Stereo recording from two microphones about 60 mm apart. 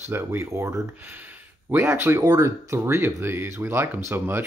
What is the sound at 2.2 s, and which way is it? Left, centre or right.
Speech, right.